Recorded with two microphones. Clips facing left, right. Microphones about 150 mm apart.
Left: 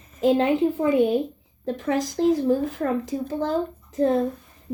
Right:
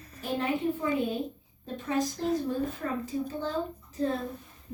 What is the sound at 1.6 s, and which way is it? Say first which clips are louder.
A woman's voice: left 5 dB; 70° left (ahead or behind).